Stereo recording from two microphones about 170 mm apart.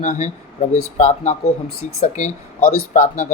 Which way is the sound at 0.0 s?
45° left (ahead or behind).